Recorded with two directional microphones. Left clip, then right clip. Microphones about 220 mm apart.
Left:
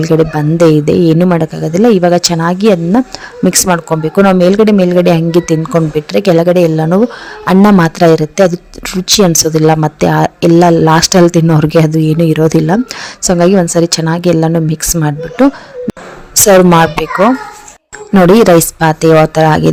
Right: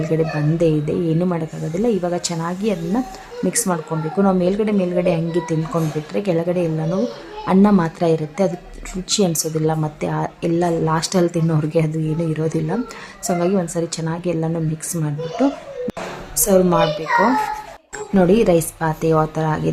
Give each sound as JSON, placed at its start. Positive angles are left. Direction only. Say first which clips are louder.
{"t": 0.0, "sound": "speech", "louder": "left 10 dB", "side_deg": 40}
{"t": 18.1, "sound": "speech", "louder": "left 10 dB", "side_deg": 40}